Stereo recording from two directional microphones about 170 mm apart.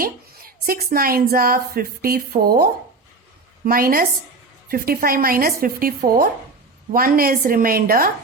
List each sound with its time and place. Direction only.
0.0 s a woman's voice: 60° right (ahead or behind)